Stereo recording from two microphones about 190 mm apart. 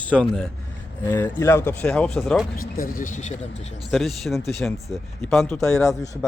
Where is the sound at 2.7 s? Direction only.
45° left (ahead or behind).